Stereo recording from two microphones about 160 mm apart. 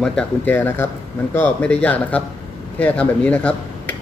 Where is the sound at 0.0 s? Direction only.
5° left (ahead or behind).